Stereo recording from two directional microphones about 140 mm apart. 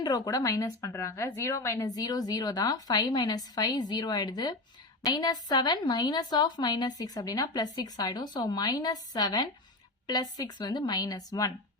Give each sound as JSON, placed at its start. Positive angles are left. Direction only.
{"t": 0.0, "sound": "a woman's voice", "side_deg": 25}